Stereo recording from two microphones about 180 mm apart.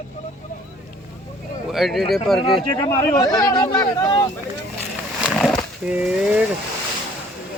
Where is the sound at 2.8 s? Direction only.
15° left (ahead or behind).